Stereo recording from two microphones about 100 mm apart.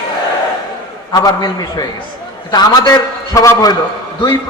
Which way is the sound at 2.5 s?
40° left (ahead or behind).